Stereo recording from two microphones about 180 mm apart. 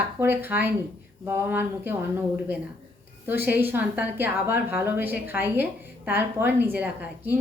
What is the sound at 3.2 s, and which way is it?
A woman's voice, 10° right (ahead or behind).